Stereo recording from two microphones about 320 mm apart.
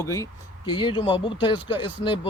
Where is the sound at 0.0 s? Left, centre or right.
Centre.